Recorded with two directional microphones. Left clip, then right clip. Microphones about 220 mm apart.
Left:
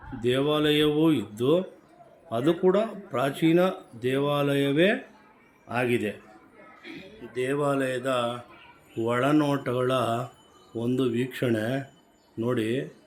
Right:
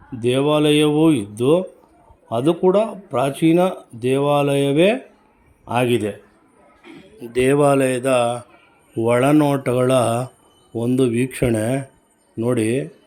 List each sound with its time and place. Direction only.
0.2 s speech: 25° right (ahead or behind)
6.8 s music: 10° right (ahead or behind)
7.2 s speech: 30° right (ahead or behind)